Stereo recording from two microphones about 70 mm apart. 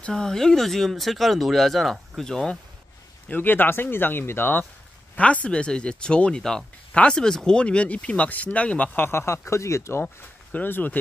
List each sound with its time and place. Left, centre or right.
0.0 s speech: centre
3.3 s speech: left
5.1 s speech: centre
9.0 s speech: left
10.5 s speech: left